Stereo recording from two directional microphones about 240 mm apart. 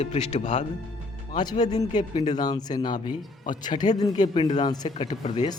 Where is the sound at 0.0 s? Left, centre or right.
Left.